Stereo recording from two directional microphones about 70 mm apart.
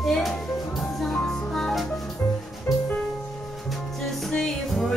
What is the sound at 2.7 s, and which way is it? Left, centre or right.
Music, centre.